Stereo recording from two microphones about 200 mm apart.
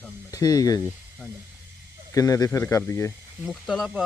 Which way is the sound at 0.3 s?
15° left (ahead or behind).